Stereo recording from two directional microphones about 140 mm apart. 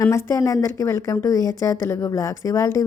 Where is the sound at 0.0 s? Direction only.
20° left (ahead or behind).